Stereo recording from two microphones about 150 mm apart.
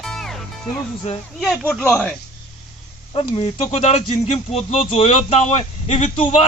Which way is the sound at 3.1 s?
35° left (ahead or behind).